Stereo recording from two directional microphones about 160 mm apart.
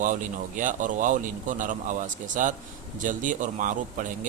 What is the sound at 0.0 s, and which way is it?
Speech, 55° right (ahead or behind).